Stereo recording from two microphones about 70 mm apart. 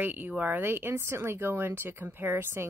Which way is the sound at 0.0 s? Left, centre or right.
Right.